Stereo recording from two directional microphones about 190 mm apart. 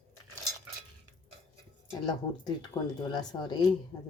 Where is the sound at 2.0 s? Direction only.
20° left (ahead or behind).